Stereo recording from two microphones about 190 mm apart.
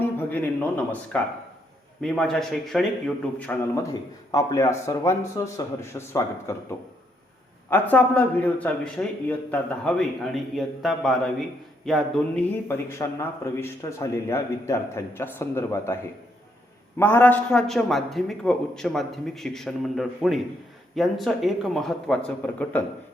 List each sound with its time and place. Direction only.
0.0 s a man's voice: 10° left (ahead or behind)
4.3 s a man's voice: 20° left (ahead or behind)
17.0 s a man's voice: 10° left (ahead or behind)